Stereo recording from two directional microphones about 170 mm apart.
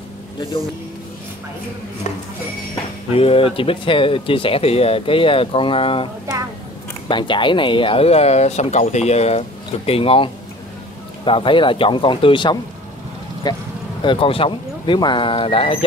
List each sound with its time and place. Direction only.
3.1 s speech: 35° left (ahead or behind)
7.1 s speech: 30° left (ahead or behind)